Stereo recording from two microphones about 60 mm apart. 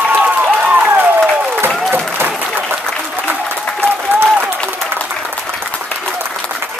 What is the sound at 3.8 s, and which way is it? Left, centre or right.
Applause, right.